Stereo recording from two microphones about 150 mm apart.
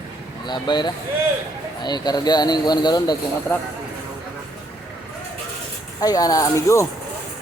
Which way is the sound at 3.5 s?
15° left (ahead or behind).